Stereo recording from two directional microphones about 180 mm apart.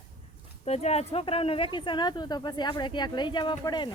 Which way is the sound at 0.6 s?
35° left (ahead or behind).